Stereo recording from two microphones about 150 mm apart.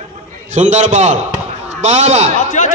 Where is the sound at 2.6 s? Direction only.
55° left (ahead or behind).